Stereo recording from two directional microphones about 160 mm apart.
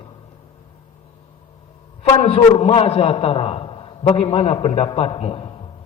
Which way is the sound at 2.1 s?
35° left (ahead or behind).